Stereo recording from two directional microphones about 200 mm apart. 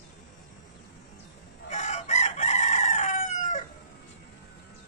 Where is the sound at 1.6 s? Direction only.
35° left (ahead or behind).